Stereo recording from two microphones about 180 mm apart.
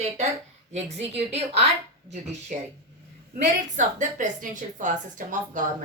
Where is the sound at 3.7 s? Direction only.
45° right (ahead or behind).